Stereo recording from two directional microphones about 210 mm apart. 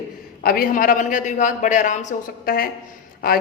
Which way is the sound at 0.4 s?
45° left (ahead or behind).